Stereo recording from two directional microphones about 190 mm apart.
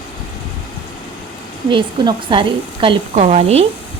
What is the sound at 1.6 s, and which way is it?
A woman's voice, 25° right (ahead or behind).